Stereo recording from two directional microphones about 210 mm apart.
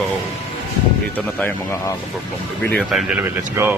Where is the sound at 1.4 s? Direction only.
10° left (ahead or behind).